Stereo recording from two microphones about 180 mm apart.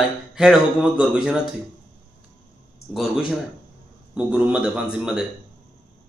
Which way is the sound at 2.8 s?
65° left (ahead or behind).